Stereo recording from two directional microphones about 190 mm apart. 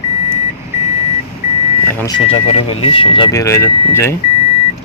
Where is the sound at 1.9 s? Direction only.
10° left (ahead or behind).